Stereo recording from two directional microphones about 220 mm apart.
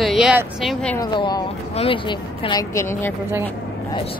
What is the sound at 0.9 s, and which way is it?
Speech, 20° left (ahead or behind).